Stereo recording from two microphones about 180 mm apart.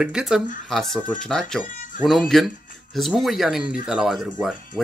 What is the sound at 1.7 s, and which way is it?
Music, 45° left (ahead or behind).